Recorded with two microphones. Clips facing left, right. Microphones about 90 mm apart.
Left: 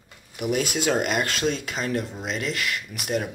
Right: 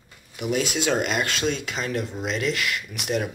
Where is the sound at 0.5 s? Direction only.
50° left (ahead or behind).